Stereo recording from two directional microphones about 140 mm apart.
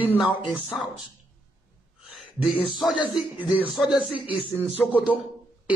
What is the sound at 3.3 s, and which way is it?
Speech, 35° left (ahead or behind).